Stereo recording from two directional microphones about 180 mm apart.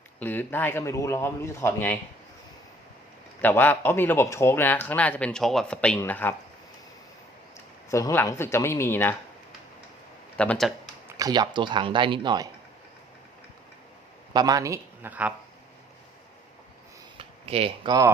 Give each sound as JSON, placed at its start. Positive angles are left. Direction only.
{"t": 0.2, "sound": "speech", "side_deg": 10}
{"t": 3.4, "sound": "speech", "side_deg": 10}
{"t": 7.9, "sound": "speech", "side_deg": 15}
{"t": 10.3, "sound": "speech", "side_deg": 5}
{"t": 11.2, "sound": "speech", "side_deg": -25}
{"t": 14.3, "sound": "speech", "side_deg": -20}
{"t": 17.2, "sound": "a sound", "side_deg": -35}